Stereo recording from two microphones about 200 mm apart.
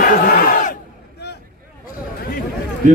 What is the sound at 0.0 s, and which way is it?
Crowd, 45° left (ahead or behind).